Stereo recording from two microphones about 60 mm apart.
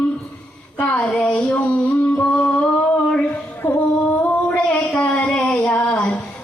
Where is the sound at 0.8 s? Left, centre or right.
Left.